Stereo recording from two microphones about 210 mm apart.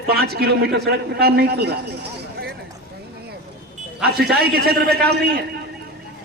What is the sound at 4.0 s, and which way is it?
A man's voice, 50° right (ahead or behind).